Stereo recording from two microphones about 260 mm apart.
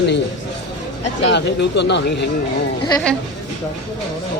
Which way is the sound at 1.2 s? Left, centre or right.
Left.